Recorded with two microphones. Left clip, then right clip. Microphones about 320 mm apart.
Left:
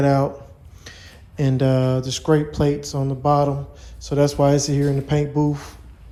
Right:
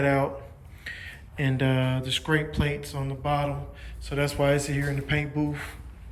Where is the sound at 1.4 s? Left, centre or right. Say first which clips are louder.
Left 7 dB; centre.